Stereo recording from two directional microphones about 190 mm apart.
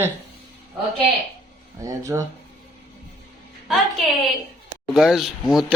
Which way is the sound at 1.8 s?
15° right (ahead or behind).